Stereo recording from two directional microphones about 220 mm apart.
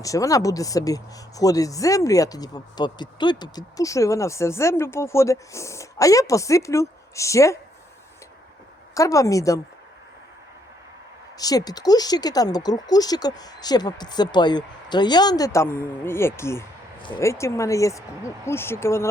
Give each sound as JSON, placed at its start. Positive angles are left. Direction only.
{"t": 0.0, "sound": "speech", "side_deg": 15}
{"t": 9.0, "sound": "speech", "side_deg": 15}
{"t": 11.3, "sound": "speech", "side_deg": 15}